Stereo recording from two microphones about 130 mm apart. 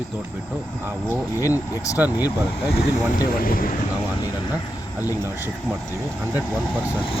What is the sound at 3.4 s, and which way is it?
Speech, 90° left.